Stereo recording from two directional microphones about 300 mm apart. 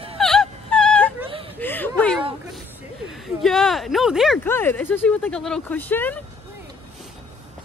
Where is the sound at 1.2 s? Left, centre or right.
Centre.